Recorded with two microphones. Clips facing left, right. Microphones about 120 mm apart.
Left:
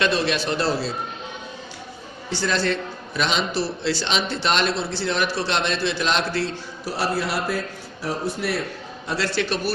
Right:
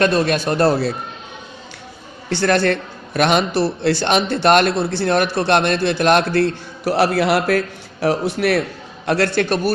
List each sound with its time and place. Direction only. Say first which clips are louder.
0.0 s speech: right 5 dB; 50° right (ahead or behind)
2.3 s a man's voice: right 7 dB; 60° right (ahead or behind)
9.0 s speech: right 7 dB; 60° right (ahead or behind)